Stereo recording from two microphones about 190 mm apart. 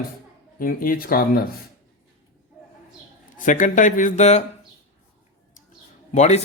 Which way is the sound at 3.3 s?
45° left (ahead or behind).